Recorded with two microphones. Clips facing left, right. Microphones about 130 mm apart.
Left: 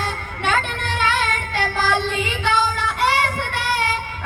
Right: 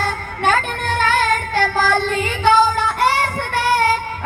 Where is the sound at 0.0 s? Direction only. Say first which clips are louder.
Right 5 dB; 45° right (ahead or behind).